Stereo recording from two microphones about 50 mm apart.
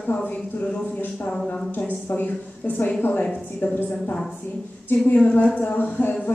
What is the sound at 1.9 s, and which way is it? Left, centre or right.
A woman's voice, left.